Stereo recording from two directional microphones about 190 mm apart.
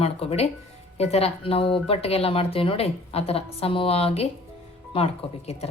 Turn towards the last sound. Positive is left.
turn(degrees=35)  # may be behind; listen again after turning